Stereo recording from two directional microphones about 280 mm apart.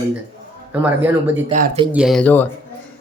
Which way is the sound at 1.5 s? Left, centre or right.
Right.